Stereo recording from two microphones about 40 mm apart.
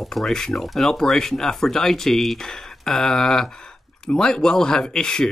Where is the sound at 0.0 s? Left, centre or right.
Centre.